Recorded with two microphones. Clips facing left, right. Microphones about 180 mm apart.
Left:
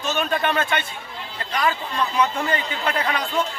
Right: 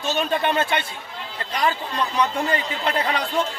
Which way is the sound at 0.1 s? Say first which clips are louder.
Right 1 dB; 30° right (ahead or behind).